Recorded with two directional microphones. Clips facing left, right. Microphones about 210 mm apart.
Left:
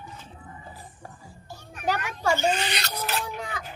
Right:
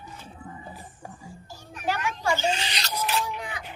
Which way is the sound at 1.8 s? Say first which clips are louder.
Left 1 dB; 40° left (ahead or behind).